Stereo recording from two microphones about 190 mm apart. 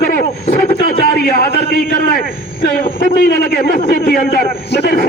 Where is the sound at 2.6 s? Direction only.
50° left (ahead or behind).